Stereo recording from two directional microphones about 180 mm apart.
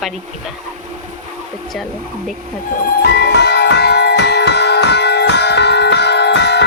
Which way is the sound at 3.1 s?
65° left (ahead or behind).